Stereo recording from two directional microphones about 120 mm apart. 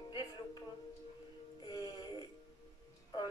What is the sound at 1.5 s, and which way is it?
Music, 30° left (ahead or behind).